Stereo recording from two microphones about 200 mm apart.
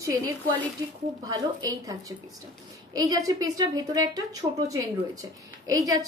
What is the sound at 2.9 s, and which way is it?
A woman's voice, 15° right (ahead or behind).